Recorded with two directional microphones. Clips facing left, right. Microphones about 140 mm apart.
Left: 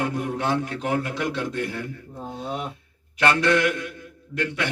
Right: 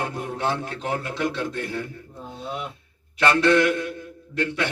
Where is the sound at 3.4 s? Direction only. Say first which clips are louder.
Right 3 dB; 30° right (ahead or behind).